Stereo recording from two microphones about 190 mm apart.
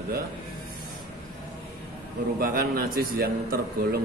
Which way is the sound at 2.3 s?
50° right (ahead or behind).